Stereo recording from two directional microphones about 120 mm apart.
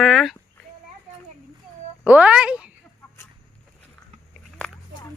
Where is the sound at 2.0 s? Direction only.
10° right (ahead or behind).